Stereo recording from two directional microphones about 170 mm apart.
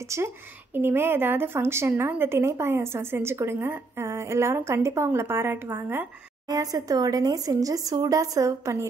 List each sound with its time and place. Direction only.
0.0 s a woman's voice: 15° right (ahead or behind)